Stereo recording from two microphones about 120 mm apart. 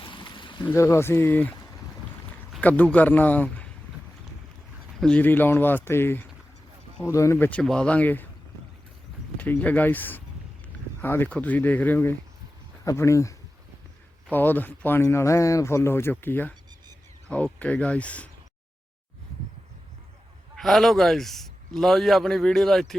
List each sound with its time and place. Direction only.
0.0 s a sound: 45° left (ahead or behind)
0.7 s speech: 20° left (ahead or behind)
2.6 s speech: 10° left (ahead or behind)
4.9 s speech: 10° left (ahead or behind)
7.6 s speech: 5° left (ahead or behind)
9.4 s speech: 15° left (ahead or behind)
12.8 s speech: 25° left (ahead or behind); by 18.3 s 10° left (ahead or behind)
20.6 s a man's voice: centre (ahead or behind)